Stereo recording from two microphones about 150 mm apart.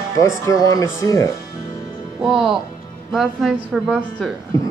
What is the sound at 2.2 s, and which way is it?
A woman's voice, 5° right (ahead or behind).